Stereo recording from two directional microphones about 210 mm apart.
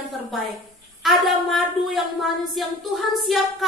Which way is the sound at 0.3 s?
Centre (ahead or behind).